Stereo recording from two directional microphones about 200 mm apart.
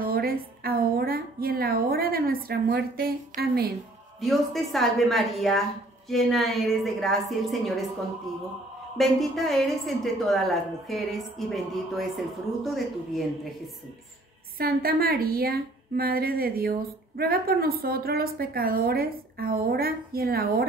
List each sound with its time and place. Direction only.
0.0 s a woman's voice: 50° right (ahead or behind)
4.2 s a woman's voice: centre (ahead or behind)
8.9 s a woman's voice: centre (ahead or behind)
14.6 s a woman's voice: 50° right (ahead or behind)